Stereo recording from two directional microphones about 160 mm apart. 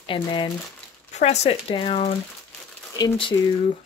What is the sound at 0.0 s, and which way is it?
Speech, 30° left (ahead or behind).